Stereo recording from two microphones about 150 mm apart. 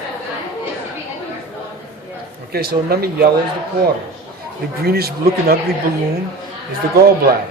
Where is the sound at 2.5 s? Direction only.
90° right.